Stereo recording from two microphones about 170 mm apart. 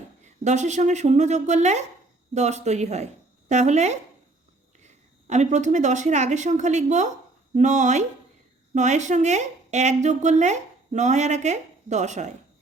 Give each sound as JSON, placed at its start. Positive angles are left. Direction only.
{"t": 0.4, "sound": "a woman's voice", "side_deg": -45}
{"t": 5.3, "sound": "a woman's voice", "side_deg": -45}